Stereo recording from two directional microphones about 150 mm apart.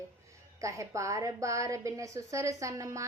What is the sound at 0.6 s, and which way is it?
A woman's voice, 20° right (ahead or behind).